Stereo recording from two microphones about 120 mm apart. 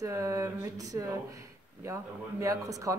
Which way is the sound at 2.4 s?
25° right (ahead or behind).